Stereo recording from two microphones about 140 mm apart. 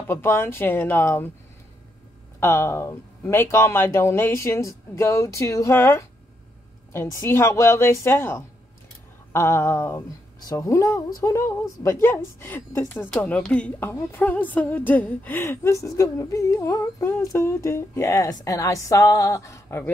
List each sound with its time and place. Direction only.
0.1 s speech: 15° left (ahead or behind)
2.4 s a woman's voice: 20° left (ahead or behind)